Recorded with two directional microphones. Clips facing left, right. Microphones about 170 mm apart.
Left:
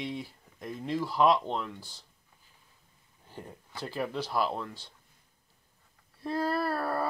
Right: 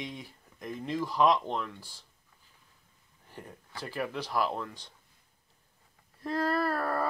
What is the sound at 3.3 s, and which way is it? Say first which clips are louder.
Speech: left 1 dB; 15° left (ahead or behind).